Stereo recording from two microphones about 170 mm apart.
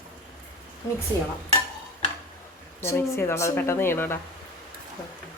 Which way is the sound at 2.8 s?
15° left (ahead or behind).